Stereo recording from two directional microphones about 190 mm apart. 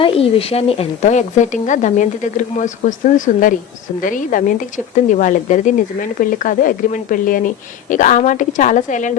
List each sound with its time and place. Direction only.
0.0 s speech: 30° left (ahead or behind)